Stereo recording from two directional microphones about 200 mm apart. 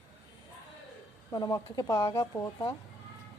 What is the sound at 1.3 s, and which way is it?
Speech, 15° left (ahead or behind).